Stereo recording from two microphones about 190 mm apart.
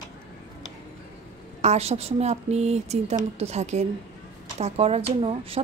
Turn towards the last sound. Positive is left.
turn(degrees=-30)  # may be behind; listen again after turning